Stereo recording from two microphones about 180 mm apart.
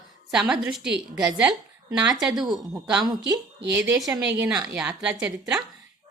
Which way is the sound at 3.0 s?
20° right (ahead or behind).